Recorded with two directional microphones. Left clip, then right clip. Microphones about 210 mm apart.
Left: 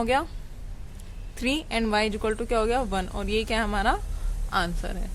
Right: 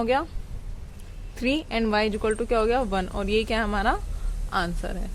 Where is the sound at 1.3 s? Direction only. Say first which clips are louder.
Right 1 dB; 5° right (ahead or behind).